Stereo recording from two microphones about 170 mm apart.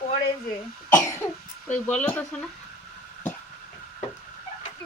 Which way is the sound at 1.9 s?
10° left (ahead or behind).